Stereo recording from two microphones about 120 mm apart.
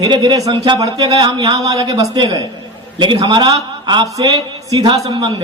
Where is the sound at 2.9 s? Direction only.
40° right (ahead or behind).